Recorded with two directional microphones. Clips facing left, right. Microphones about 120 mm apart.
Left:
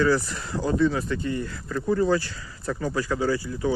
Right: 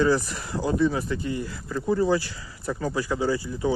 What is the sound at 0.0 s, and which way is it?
Speech, 20° right (ahead or behind).